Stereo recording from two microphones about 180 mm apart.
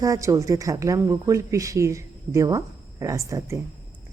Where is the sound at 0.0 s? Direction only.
20° right (ahead or behind).